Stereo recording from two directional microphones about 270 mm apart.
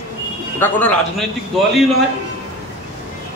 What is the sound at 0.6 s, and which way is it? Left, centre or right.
Speech, centre.